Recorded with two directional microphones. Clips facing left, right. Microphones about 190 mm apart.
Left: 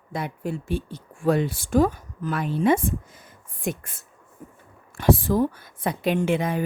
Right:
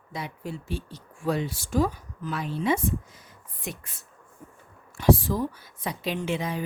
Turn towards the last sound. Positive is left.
turn(degrees=55)  # may be behind; listen again after turning